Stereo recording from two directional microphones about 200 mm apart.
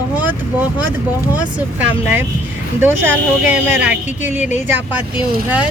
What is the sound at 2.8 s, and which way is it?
Speech, 10° right (ahead or behind).